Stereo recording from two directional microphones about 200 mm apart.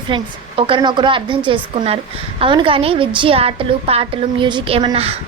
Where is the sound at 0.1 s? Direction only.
25° right (ahead or behind).